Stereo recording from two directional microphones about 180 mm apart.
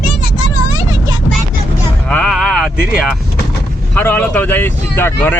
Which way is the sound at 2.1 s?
5° left (ahead or behind).